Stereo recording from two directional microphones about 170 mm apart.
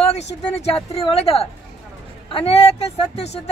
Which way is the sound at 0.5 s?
40° left (ahead or behind).